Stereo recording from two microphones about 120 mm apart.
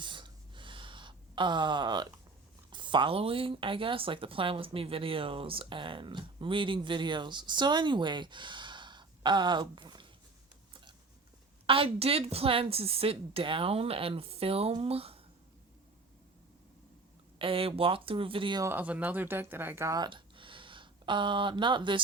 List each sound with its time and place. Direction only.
0.0 s gasp: 40° right (ahead or behind)
2.6 s speech: 40° right (ahead or behind)
11.6 s speech: 50° right (ahead or behind)
17.3 s speech: 50° right (ahead or behind)
18.6 s speech: 15° right (ahead or behind)
20.0 s a sound: 40° right (ahead or behind)